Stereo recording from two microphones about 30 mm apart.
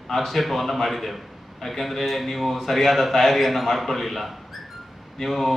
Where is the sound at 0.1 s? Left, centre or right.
Centre.